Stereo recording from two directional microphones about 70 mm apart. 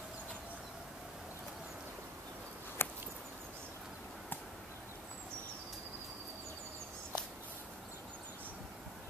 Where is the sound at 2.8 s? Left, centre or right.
Left.